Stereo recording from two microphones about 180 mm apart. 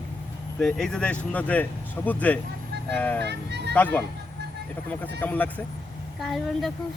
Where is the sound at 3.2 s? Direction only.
70° right (ahead or behind).